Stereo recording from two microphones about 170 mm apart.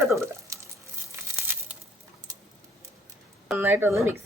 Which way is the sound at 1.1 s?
10° right (ahead or behind).